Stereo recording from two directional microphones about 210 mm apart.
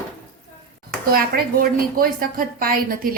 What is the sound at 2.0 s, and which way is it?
A woman's voice, 45° right (ahead or behind).